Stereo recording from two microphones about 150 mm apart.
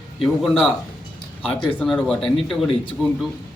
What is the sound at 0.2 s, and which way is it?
Speech, 5° left (ahead or behind).